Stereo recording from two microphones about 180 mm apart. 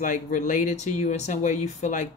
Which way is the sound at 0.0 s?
45° left (ahead or behind).